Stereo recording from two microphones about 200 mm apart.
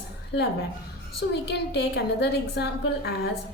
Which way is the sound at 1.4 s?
55° left (ahead or behind).